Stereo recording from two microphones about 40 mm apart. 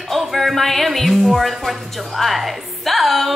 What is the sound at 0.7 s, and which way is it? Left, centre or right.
A woman's voice, centre.